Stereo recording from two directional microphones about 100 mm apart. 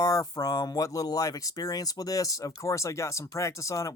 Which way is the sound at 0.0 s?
35° left (ahead or behind).